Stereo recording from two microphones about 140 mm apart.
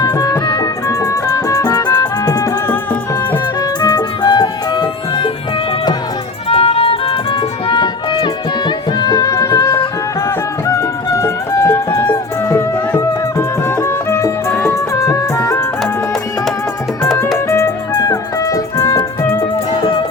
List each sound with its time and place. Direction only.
0.0 s music: 25° left (ahead or behind)
3.8 s music: 30° left (ahead or behind)
6.5 s music: 45° left (ahead or behind); by 15.6 s 20° left (ahead or behind)
17.3 s music: 20° left (ahead or behind)